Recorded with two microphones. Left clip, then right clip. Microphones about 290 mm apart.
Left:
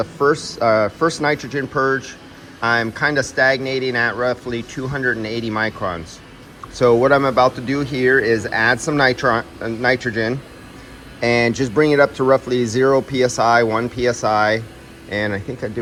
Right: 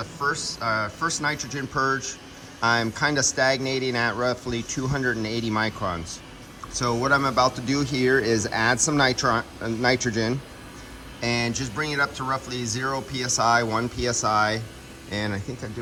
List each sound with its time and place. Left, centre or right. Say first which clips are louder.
0.3 s speech: left 9 dB; centre